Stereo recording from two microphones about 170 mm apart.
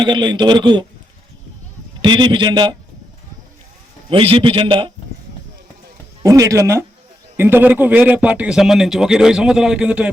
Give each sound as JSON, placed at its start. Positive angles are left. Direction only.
{"t": 0.0, "sound": "a man's voice", "side_deg": -25}
{"t": 2.0, "sound": "a man's voice", "side_deg": -25}
{"t": 4.1, "sound": "a man's voice", "side_deg": -35}
{"t": 6.2, "sound": "a man's voice", "side_deg": -20}